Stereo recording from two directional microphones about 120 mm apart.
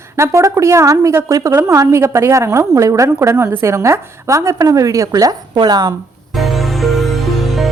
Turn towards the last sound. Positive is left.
turn(degrees=0)  # may be behind; listen again after turning